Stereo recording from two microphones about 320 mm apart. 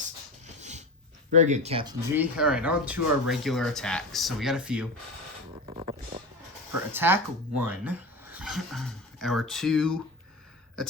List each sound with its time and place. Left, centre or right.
0.4 s a sound: right
1.3 s speech: right; by 4.9 s centre
6.9 s speech: centre